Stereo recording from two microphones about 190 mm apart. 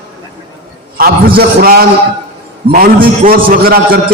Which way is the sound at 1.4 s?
50° right (ahead or behind).